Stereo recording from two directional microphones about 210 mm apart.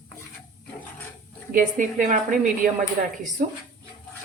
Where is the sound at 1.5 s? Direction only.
35° right (ahead or behind).